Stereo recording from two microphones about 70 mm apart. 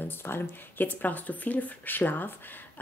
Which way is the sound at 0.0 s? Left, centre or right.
Left.